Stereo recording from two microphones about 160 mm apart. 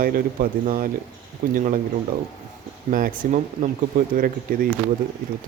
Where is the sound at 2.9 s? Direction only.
60° right (ahead or behind).